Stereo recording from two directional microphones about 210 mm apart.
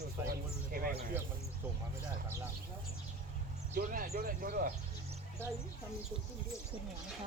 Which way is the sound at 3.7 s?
40° right (ahead or behind).